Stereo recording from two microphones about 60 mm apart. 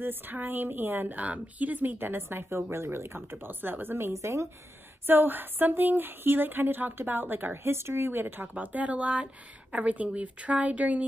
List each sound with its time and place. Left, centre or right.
0.0 s speech: right
4.1 s speech: right
5.0 s speech: right